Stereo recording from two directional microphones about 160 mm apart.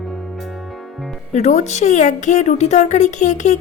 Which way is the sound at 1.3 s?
45° left (ahead or behind).